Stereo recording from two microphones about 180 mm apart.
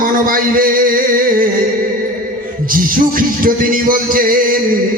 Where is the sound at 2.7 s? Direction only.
50° right (ahead or behind).